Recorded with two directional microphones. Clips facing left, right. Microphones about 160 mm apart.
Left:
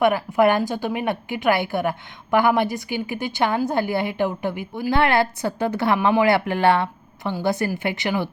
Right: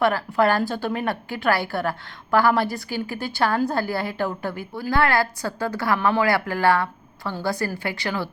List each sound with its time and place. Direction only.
0.0 s a woman's voice: 20° left (ahead or behind)